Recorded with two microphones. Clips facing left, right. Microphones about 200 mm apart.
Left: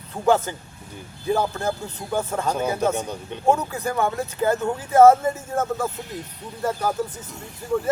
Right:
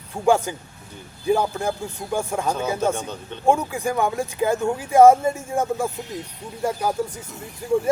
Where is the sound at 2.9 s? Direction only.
10° left (ahead or behind).